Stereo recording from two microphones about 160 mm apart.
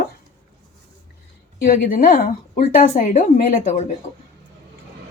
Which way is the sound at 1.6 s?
60° left (ahead or behind).